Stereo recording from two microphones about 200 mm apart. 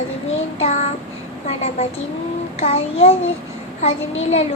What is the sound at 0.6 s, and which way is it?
Child singing, 35° left (ahead or behind).